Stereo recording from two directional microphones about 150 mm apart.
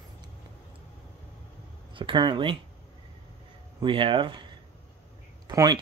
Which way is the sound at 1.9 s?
35° right (ahead or behind).